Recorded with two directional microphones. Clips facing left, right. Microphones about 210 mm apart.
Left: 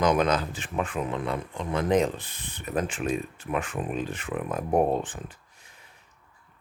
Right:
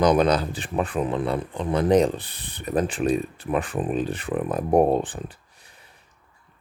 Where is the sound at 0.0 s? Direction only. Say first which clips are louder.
Right 4 dB; 35° right (ahead or behind).